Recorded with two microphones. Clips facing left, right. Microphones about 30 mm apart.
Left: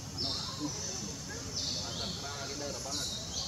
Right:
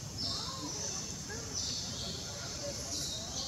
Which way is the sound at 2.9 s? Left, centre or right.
Left.